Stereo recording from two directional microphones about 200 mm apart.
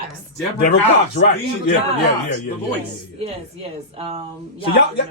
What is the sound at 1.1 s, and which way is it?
Speech, 60° left (ahead or behind).